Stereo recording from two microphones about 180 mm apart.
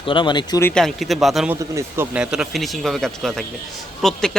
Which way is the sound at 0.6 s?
5° left (ahead or behind).